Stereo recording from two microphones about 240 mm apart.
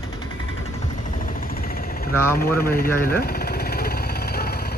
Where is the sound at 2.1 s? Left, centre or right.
Centre.